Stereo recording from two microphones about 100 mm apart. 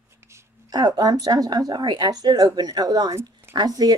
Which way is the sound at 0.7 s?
40° right (ahead or behind).